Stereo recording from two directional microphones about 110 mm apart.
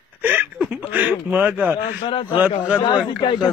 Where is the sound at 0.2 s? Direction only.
15° right (ahead or behind).